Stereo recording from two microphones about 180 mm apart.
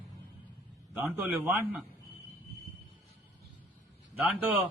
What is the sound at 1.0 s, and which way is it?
Speech, 15° right (ahead or behind).